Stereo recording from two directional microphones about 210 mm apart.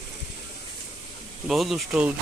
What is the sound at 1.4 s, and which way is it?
Speech, centre (ahead or behind).